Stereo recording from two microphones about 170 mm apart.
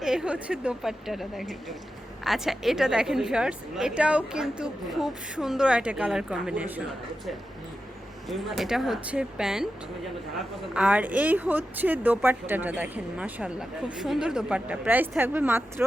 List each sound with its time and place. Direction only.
0.0 s a woman's voice: 5° right (ahead or behind)
8.3 s a woman's voice: centre (ahead or behind)